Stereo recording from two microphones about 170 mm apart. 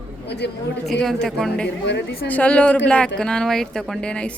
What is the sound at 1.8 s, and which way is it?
Speech, 90° left.